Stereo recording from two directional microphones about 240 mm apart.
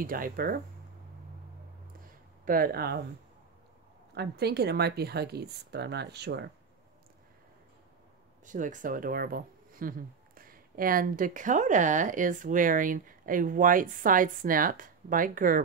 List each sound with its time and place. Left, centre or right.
0.0 s speech: right
2.4 s speech: right
4.1 s speech: right
8.5 s speech: right